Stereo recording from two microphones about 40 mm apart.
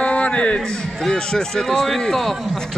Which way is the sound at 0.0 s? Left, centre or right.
Left.